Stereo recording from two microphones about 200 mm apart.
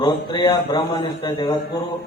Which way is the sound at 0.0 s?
25° left (ahead or behind).